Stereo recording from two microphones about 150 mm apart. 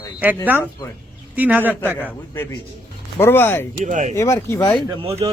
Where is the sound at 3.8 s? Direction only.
55° right (ahead or behind).